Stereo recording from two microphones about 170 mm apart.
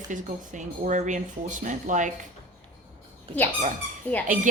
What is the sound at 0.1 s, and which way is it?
Speech, 45° right (ahead or behind).